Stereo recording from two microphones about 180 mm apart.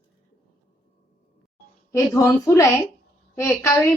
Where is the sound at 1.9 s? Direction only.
15° left (ahead or behind).